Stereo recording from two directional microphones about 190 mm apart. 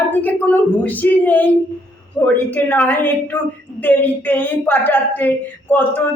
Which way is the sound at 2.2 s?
10° left (ahead or behind).